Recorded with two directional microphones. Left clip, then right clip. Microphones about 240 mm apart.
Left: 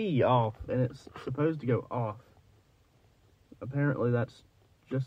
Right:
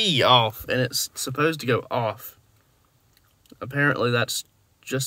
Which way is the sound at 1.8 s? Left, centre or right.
Right.